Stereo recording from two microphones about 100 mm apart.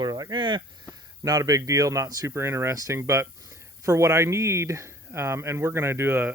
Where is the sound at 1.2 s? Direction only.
35° right (ahead or behind).